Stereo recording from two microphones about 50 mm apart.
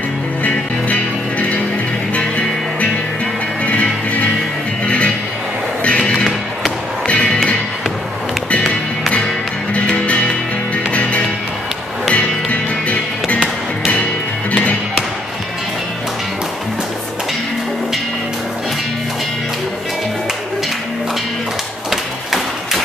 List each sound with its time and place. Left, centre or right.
0.4 s music: left
2.1 s music: left
9.8 s music: left
21.9 s tap: centre